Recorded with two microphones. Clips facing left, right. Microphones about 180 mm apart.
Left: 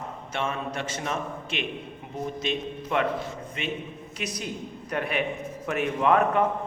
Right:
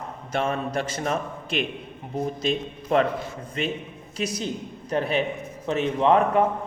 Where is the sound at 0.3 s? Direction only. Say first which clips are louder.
Right 5 dB; 35° right (ahead or behind).